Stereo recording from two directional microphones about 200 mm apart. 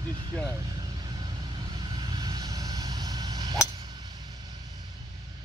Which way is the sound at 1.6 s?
20° right (ahead or behind).